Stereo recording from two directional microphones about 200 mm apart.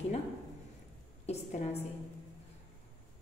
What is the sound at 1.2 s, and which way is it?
Speech, 35° left (ahead or behind).